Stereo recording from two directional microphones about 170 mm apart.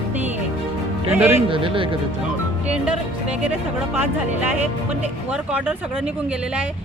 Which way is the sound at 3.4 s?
10° right (ahead or behind).